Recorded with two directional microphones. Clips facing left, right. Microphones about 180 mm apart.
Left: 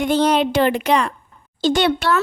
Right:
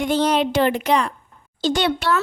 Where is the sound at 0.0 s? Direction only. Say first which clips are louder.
Left 2 dB; 60° left (ahead or behind).